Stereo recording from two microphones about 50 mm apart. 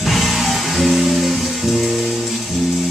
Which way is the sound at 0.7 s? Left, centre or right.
Centre.